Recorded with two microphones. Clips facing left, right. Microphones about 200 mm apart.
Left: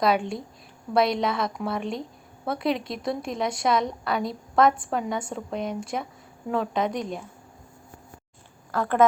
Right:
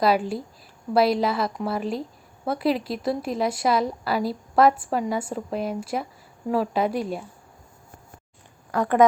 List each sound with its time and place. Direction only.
0.0 s a woman's voice: 5° right (ahead or behind)
8.7 s speech: 15° right (ahead or behind)